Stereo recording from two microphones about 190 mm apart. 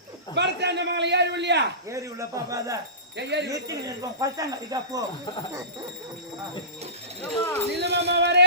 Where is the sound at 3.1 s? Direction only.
65° right (ahead or behind).